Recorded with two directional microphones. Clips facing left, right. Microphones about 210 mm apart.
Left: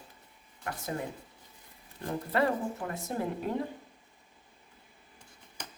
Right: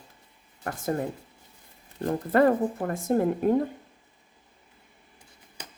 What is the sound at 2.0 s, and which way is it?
Speech, 50° right (ahead or behind).